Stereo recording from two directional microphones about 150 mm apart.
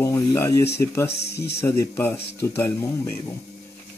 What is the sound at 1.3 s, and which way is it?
Speech, 90° left.